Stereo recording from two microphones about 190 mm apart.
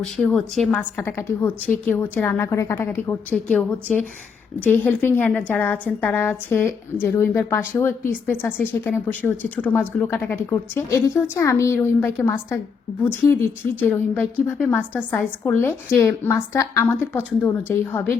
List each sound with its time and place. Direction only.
0.0 s a woman's voice: 5° left (ahead or behind)